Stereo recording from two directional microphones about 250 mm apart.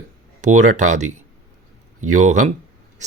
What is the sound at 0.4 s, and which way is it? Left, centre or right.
Speech, right.